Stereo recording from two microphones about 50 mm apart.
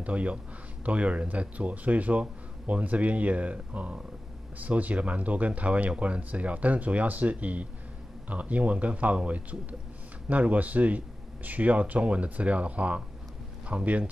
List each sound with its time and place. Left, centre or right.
0.0 s a man's voice: right